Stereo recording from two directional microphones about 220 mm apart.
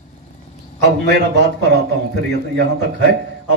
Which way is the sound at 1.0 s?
50° right (ahead or behind).